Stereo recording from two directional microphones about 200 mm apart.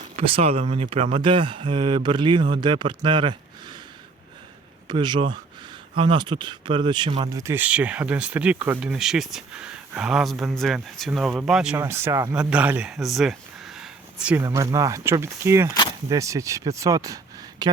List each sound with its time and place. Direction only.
0.2 s speech: 30° right (ahead or behind)
4.9 s speech: 25° right (ahead or behind); by 14.4 s 5° right (ahead or behind)
14.4 s speech: 15° right (ahead or behind)